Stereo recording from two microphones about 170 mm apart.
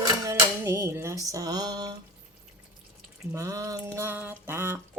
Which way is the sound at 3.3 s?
20° right (ahead or behind).